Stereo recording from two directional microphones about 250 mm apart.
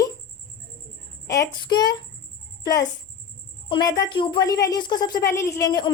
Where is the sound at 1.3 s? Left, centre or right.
Centre.